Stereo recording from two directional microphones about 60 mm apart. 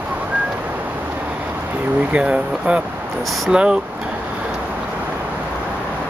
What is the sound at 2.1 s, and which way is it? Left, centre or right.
Speech, right.